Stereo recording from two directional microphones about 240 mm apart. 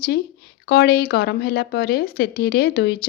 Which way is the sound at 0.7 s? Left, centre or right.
Left.